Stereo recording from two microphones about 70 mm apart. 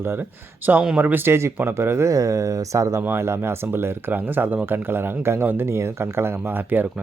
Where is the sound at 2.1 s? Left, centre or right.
Right.